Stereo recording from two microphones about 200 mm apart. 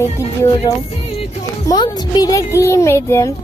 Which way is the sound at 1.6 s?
20° left (ahead or behind).